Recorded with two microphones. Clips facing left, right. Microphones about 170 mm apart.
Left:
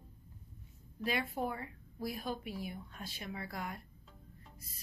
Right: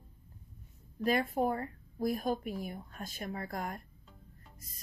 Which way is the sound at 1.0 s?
45° right (ahead or behind).